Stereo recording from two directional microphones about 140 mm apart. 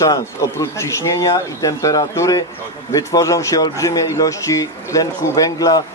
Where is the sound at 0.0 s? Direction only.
25° left (ahead or behind).